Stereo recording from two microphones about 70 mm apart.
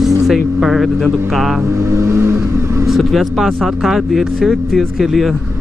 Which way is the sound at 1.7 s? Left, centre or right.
Right.